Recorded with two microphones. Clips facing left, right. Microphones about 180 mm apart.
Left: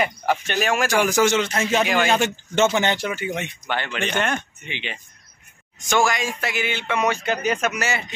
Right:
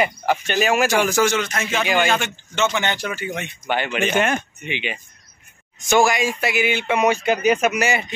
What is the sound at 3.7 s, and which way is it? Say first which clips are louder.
Speech: right 6 dB; 15° right (ahead or behind).